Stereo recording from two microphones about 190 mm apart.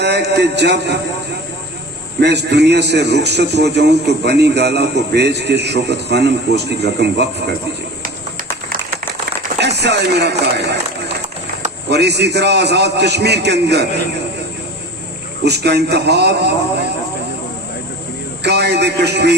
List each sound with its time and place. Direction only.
0.0 s a man's voice: 60° right (ahead or behind)
2.2 s a man's voice: 60° right (ahead or behind)
8.0 s a sound: 45° right (ahead or behind)
9.6 s speech: 60° right (ahead or behind)
11.9 s a man's voice: 60° right (ahead or behind)
15.4 s a man's voice: 60° right (ahead or behind)
18.4 s a man's voice: 60° right (ahead or behind)